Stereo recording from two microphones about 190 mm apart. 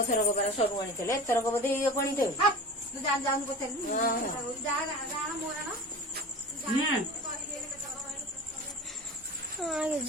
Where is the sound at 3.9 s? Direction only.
50° left (ahead or behind).